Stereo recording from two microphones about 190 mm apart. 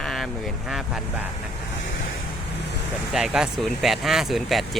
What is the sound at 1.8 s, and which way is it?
Waves, 75° left (ahead or behind).